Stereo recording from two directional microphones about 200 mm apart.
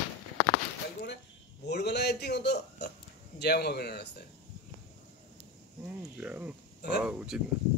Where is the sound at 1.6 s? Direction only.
55° left (ahead or behind).